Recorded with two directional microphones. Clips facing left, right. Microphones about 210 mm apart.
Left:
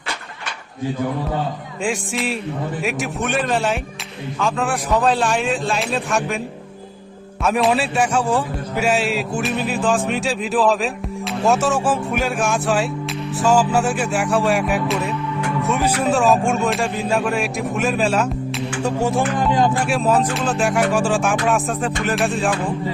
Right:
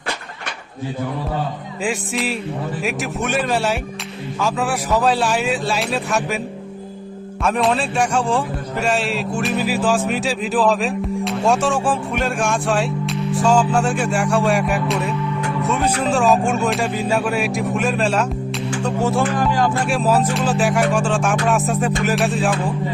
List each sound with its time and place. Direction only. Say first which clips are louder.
1.8 s a man's voice: even; centre (ahead or behind)
7.4 s a man's voice: left 1 dB; 5° left (ahead or behind)
18.8 s music: even; 10° left (ahead or behind)
19.9 s a man's voice: even; centre (ahead or behind)